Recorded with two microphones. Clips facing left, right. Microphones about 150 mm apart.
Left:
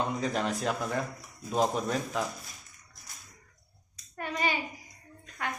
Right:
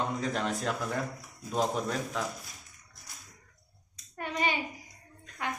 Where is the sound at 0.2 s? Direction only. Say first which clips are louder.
Left 1 dB; centre (ahead or behind).